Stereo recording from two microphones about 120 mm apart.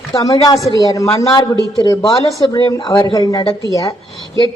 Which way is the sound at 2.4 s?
40° left (ahead or behind).